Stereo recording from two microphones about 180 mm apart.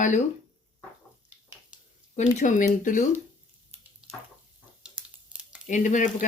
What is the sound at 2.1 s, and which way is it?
Speech, 40° left (ahead or behind).